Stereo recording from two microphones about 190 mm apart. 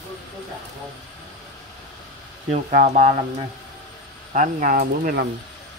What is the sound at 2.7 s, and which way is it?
Speech, 40° right (ahead or behind).